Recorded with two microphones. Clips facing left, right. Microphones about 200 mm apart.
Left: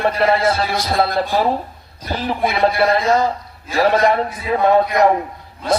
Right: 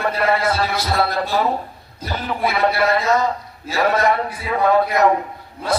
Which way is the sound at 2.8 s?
30° left (ahead or behind).